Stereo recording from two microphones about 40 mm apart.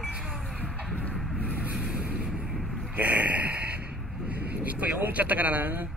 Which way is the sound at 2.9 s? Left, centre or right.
Right.